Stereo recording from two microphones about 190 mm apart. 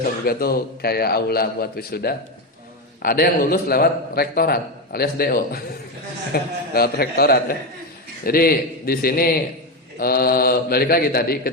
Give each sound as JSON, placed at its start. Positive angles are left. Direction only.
{"t": 0.3, "sound": "a man's voice", "side_deg": 55}